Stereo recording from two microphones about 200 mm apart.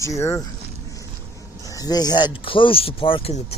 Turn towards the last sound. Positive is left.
turn(degrees=30)  # may be behind; listen again after turning